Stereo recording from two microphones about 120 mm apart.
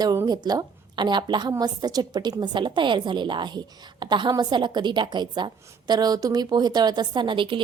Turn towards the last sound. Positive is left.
turn(degrees=-45)  # may be behind; listen again after turning